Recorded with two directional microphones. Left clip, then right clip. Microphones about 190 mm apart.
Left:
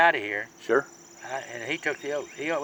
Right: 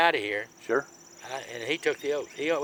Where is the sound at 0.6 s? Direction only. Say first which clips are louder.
Left 4 dB; 30° left (ahead or behind).